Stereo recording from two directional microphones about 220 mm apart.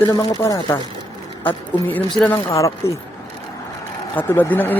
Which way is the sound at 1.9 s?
5° left (ahead or behind).